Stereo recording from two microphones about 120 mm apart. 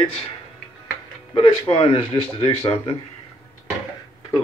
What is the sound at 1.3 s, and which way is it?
Speech, 55° left (ahead or behind).